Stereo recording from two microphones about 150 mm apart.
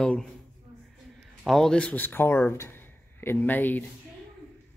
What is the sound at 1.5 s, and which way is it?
Speech, 5° left (ahead or behind).